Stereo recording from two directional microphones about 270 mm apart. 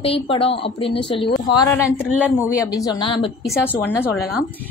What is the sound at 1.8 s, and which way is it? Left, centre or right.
Speech, centre.